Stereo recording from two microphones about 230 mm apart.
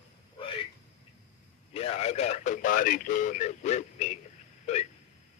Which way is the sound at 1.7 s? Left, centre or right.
Left.